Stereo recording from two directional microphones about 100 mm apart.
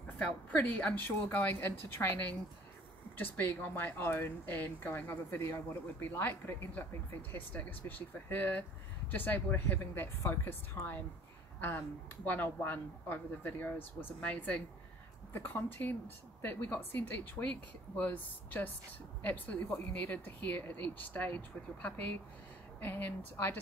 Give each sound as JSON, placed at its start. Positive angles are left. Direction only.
{"t": 0.0, "sound": "a woman's voice", "side_deg": 15}
{"t": 12.3, "sound": "a woman's voice", "side_deg": 20}